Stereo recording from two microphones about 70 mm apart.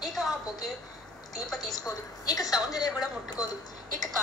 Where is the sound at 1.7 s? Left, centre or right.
Left.